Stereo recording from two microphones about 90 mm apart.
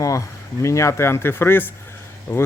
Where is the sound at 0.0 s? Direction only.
35° left (ahead or behind).